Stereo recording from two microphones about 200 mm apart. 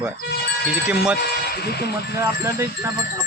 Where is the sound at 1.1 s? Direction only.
55° left (ahead or behind).